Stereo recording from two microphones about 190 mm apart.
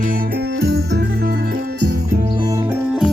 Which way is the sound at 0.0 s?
50° right (ahead or behind).